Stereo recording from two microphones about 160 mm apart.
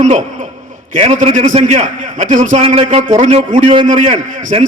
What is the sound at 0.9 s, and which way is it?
A man's voice, 40° right (ahead or behind).